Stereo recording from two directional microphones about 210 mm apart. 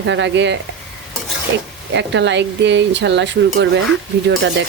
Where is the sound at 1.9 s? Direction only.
60° right (ahead or behind).